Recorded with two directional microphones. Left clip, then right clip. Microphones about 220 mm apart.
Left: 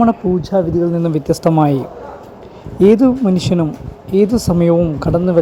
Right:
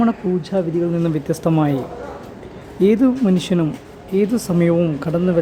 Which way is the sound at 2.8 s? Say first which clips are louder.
Left 5 dB; 15° left (ahead or behind).